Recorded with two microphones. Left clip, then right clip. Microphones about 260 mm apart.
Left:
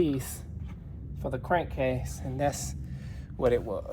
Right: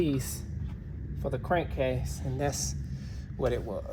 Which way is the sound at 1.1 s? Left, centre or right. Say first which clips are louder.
Left 1 dB; left.